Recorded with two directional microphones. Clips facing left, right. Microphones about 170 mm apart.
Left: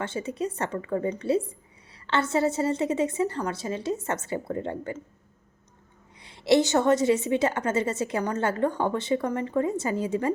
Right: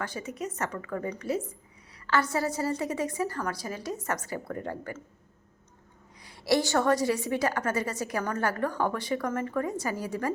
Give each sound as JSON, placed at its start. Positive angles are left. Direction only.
{"t": 0.0, "sound": "a woman's voice", "side_deg": 25}
{"t": 6.1, "sound": "a woman's voice", "side_deg": 25}